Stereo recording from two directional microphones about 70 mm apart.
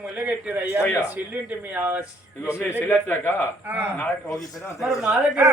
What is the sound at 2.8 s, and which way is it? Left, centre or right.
Speech, left.